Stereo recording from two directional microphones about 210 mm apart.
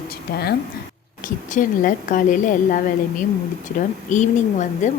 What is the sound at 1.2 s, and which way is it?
A woman's voice, 40° left (ahead or behind).